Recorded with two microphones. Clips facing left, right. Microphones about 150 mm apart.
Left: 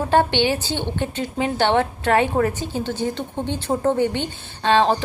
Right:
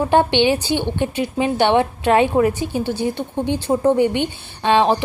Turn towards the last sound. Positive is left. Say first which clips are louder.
# right 2 dB
turn(degrees=-15)  # may be behind; listen again after turning